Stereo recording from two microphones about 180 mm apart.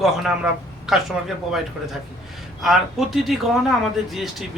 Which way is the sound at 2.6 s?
Centre (ahead or behind).